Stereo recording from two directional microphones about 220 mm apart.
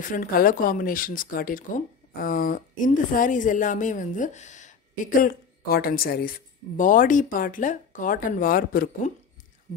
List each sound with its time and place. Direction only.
0.0 s speech: 35° left (ahead or behind)